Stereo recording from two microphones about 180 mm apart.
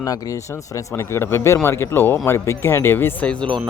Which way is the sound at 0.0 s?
20° left (ahead or behind).